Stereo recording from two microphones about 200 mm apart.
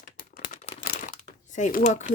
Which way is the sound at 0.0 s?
45° left (ahead or behind).